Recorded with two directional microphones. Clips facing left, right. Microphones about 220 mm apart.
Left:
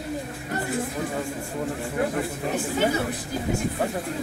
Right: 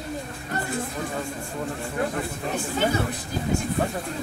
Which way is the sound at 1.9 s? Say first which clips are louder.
Left 2 dB; 20° left (ahead or behind).